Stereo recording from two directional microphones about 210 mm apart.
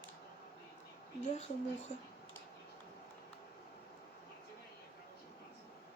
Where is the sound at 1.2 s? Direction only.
35° left (ahead or behind).